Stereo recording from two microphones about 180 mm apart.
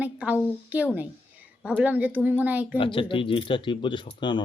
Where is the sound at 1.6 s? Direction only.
10° right (ahead or behind).